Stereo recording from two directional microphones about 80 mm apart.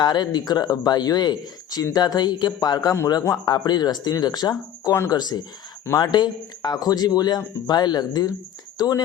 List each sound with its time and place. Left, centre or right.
0.0 s speech: left